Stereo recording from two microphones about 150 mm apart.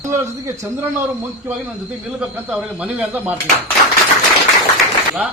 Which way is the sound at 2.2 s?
5° right (ahead or behind).